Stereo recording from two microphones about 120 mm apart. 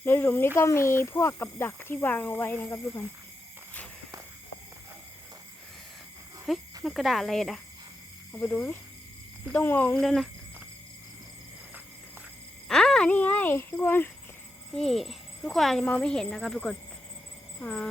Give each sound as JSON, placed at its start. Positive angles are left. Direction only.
{"t": 0.0, "sound": "speech", "side_deg": 15}
{"t": 6.5, "sound": "speech", "side_deg": 0}
{"t": 8.3, "sound": "speech", "side_deg": 15}
{"t": 10.0, "sound": "speech", "side_deg": 0}
{"t": 12.6, "sound": "a sound", "side_deg": 5}
{"t": 13.1, "sound": "speech", "side_deg": 15}
{"t": 14.7, "sound": "speech", "side_deg": 5}